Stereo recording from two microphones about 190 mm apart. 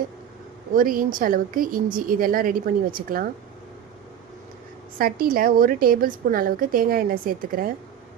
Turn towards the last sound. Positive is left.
turn(degrees=-50)  # may be behind; listen again after turning